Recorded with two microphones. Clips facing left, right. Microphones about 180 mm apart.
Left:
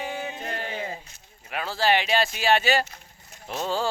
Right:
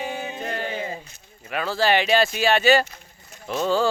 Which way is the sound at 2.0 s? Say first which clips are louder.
Right 5 dB; 5° left (ahead or behind).